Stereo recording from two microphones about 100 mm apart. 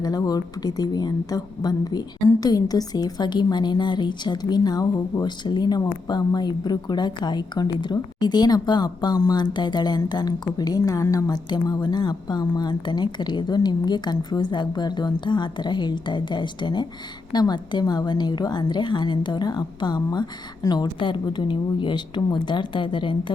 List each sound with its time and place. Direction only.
0.0 s a woman's voice: 40° left (ahead or behind)